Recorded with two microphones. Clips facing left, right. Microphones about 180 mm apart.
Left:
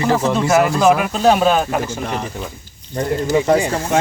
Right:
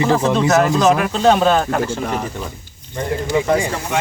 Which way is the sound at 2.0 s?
5° right (ahead or behind).